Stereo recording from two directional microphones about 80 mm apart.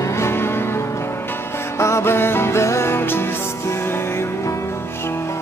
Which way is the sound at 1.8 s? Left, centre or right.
Left.